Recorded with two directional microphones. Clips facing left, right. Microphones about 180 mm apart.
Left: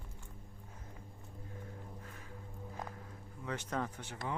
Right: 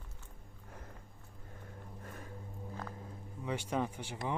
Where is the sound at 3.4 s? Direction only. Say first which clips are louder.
Right 3 dB; 10° right (ahead or behind).